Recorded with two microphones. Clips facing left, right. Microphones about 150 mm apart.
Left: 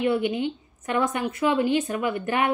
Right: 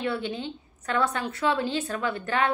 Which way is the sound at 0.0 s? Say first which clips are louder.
Left 6 dB; 15° left (ahead or behind).